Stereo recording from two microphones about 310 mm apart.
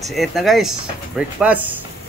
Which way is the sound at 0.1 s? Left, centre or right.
Centre.